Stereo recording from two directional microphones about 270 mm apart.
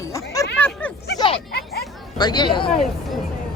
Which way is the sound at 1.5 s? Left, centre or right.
Left.